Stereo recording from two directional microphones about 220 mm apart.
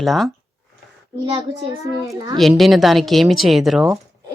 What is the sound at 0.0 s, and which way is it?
Speech, centre (ahead or behind).